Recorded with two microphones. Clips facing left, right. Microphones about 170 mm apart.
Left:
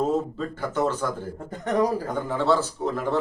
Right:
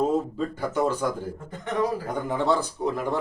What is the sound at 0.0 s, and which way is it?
Speech, 10° right (ahead or behind).